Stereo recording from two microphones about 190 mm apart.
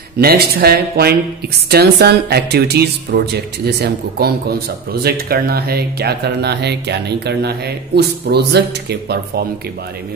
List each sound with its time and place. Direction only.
0.2 s speech: 55° right (ahead or behind)